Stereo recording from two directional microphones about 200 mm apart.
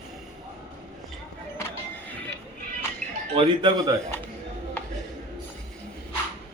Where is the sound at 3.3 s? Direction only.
30° right (ahead or behind).